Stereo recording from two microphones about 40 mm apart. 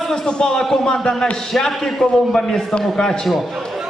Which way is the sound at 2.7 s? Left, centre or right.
Centre.